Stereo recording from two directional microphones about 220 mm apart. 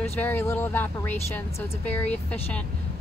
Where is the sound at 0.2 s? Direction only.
10° left (ahead or behind).